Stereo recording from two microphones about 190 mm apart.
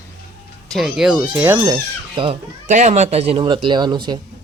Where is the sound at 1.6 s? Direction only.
25° right (ahead or behind).